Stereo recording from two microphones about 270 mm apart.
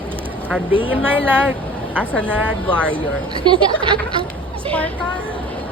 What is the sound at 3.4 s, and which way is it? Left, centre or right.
Speech, centre.